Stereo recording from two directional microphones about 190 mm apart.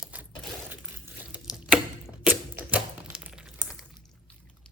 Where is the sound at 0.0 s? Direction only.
5° right (ahead or behind).